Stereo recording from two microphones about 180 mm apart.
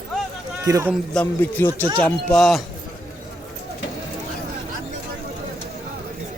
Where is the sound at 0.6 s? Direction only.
20° right (ahead or behind).